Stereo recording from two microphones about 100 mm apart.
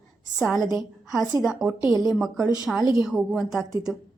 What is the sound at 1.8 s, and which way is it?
Speech, 35° right (ahead or behind).